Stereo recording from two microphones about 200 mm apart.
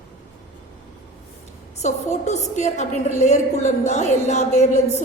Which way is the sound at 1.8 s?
35° left (ahead or behind).